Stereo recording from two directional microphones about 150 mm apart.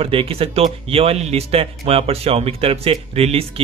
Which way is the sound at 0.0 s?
40° right (ahead or behind).